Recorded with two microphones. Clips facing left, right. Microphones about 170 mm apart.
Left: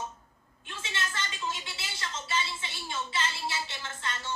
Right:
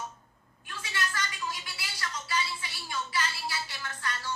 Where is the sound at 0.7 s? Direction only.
25° left (ahead or behind).